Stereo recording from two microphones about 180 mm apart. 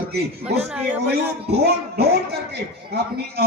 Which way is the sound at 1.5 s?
65° right (ahead or behind).